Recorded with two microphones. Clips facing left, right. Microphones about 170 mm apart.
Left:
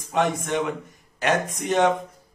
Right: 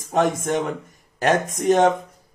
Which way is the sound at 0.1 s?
45° right (ahead or behind).